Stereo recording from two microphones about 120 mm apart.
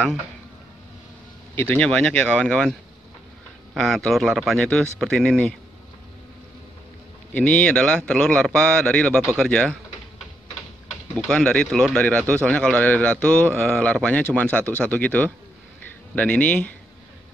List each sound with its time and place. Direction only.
1.5 s a man's voice: 15° left (ahead or behind)
3.7 s a man's voice: 5° left (ahead or behind)
7.3 s a man's voice: 10° left (ahead or behind)
11.1 s a man's voice: 5° left (ahead or behind)